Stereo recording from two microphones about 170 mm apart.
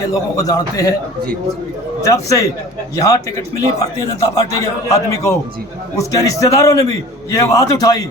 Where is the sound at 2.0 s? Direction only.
20° left (ahead or behind).